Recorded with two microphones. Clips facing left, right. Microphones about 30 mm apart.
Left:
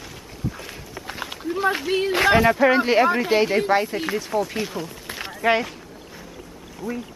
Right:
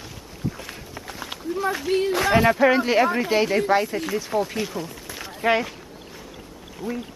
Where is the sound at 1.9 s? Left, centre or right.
Centre.